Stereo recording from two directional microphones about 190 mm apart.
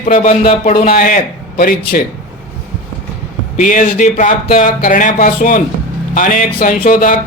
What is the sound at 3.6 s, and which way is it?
Speech, 45° left (ahead or behind).